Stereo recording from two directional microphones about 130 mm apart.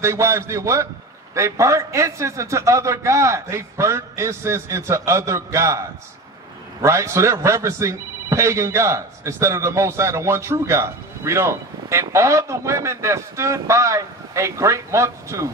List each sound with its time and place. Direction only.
0.0 s speech: 20° right (ahead or behind)